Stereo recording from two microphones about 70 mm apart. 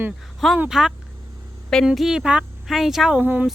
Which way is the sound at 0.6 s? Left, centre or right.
Centre.